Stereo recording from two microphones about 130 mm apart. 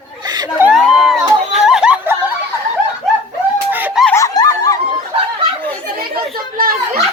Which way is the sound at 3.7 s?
15° right (ahead or behind).